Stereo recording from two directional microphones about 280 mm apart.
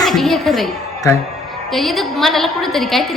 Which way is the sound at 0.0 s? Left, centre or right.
Centre.